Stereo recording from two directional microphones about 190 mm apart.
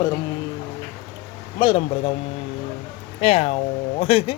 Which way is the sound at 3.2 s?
30° left (ahead or behind).